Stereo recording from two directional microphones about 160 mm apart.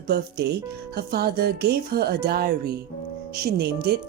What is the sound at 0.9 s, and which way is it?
Speech, 75° right (ahead or behind).